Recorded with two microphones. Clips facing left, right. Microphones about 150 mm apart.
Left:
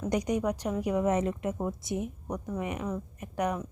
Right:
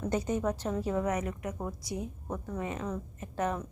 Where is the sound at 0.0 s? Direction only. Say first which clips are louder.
Left 2 dB; 15° left (ahead or behind).